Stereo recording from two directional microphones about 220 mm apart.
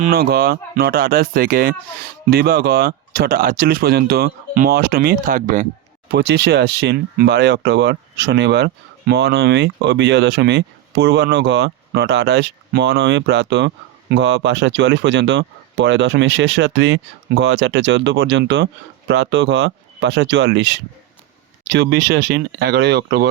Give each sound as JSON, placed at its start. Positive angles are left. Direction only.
{"t": 0.0, "sound": "speech", "side_deg": -45}
{"t": 6.1, "sound": "speech", "side_deg": -50}